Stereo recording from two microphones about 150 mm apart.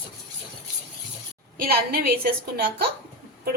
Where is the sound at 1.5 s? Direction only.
90° right.